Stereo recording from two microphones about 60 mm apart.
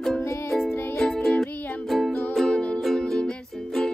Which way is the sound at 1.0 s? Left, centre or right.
Centre.